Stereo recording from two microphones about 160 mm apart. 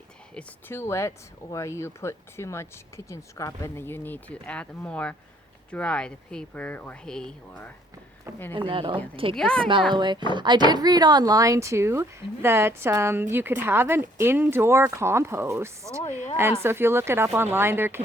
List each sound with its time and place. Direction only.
0.3 s speech: 15° left (ahead or behind)
8.5 s speech: 35° right (ahead or behind)
9.3 s a woman's voice: 5° left (ahead or behind)
9.9 s speech: 30° right (ahead or behind)